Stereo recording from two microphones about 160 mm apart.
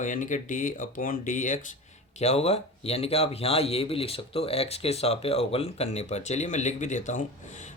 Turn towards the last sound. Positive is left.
turn(degrees=50)  # may be behind; listen again after turning